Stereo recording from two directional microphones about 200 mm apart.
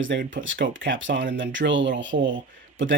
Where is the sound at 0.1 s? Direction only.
60° right (ahead or behind).